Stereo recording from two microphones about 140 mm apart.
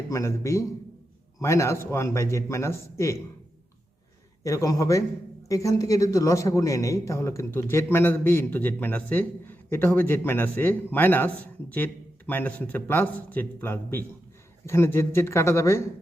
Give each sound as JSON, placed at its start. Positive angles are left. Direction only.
{"t": 0.1, "sound": "a man's voice", "side_deg": 20}
{"t": 4.4, "sound": "a man's voice", "side_deg": 25}